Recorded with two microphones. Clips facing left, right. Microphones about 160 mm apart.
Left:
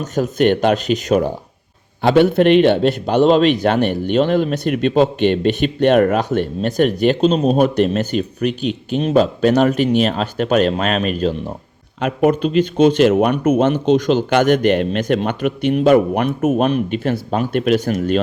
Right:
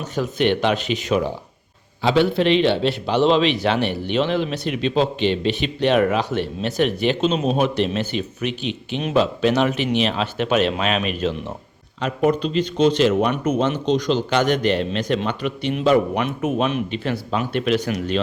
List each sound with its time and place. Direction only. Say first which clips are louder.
0.0 s a man's voice: left 5 dB; 45° left (ahead or behind)
2.0 s a man's voice: left 5 dB; 55° left (ahead or behind)
11.9 s a man's voice: left 4 dB; 55° left (ahead or behind)